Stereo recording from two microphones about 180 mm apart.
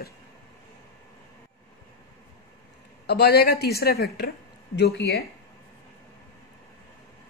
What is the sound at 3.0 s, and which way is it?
A woman's voice, 65° left (ahead or behind).